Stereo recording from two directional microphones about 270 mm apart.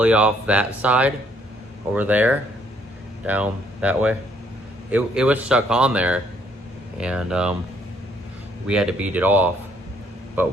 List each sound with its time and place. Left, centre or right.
0.0 s speech: centre
8.6 s speech: centre